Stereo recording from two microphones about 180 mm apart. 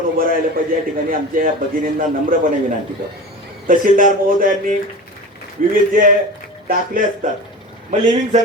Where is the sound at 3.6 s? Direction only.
50° right (ahead or behind).